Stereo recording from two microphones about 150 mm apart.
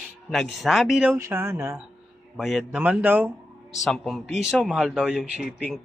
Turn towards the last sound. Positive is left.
turn(degrees=-5)  # may be behind; listen again after turning